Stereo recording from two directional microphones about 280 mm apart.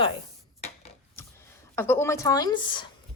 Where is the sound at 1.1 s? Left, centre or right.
Centre.